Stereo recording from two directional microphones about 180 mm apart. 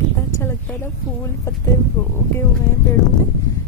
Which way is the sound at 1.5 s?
15° left (ahead or behind).